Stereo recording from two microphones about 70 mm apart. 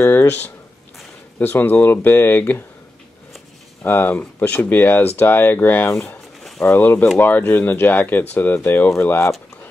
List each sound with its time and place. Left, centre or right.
0.1 s speech: left
3.8 s speech: left